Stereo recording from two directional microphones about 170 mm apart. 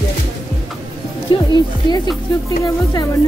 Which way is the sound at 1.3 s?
30° left (ahead or behind).